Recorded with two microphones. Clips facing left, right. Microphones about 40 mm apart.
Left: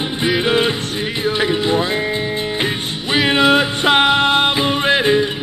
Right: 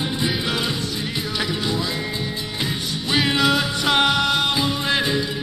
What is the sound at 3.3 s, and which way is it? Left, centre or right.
Music, left.